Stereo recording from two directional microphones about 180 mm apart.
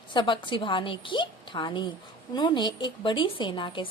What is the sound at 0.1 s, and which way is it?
A woman's voice, 25° left (ahead or behind).